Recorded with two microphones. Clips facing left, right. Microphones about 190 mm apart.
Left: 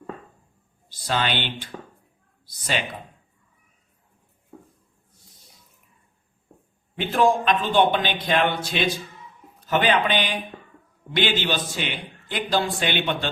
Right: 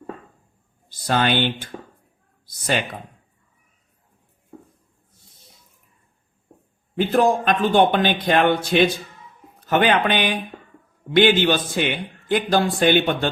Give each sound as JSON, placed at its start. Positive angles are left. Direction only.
{"t": 0.9, "sound": "a man's voice", "side_deg": -50}
{"t": 6.9, "sound": "a man's voice", "side_deg": -40}